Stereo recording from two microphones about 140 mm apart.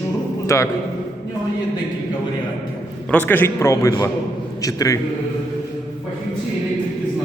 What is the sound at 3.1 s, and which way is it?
A man's voice, 15° left (ahead or behind).